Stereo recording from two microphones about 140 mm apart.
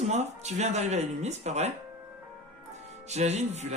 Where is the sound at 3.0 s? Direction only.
55° right (ahead or behind).